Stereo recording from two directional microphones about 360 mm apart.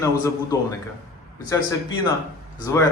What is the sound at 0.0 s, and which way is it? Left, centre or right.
Speech, centre.